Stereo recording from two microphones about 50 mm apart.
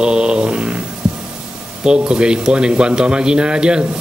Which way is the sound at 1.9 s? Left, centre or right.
Centre.